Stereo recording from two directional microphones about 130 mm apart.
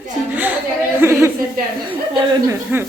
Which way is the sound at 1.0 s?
20° right (ahead or behind).